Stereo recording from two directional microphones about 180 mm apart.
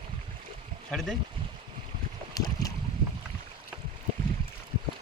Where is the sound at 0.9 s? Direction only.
Centre (ahead or behind).